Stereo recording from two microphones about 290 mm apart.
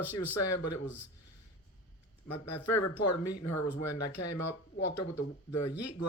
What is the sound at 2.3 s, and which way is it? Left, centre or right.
Speech, left.